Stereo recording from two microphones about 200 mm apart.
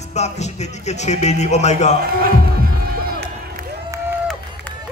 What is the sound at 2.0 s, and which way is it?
Speech, 50° right (ahead or behind).